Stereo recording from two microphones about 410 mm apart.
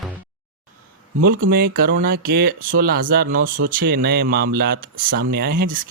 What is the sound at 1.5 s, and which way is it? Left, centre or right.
Speech, right.